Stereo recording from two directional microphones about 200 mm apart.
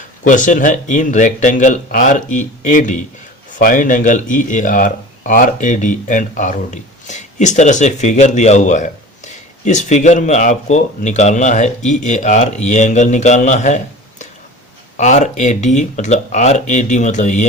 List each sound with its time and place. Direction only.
0.3 s speech: 40° left (ahead or behind)